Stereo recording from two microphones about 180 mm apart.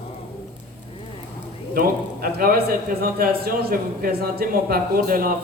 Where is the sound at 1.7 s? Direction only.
55° right (ahead or behind).